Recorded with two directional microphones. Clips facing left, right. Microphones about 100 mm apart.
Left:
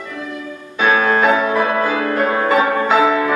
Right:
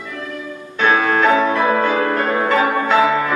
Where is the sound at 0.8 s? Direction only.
10° left (ahead or behind).